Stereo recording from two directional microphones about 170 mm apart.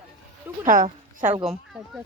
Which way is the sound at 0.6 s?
55° right (ahead or behind).